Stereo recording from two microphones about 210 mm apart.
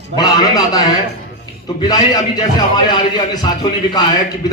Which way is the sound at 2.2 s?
20° left (ahead or behind).